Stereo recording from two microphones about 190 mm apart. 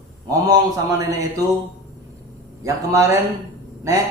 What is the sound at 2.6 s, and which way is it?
Speech, 15° right (ahead or behind).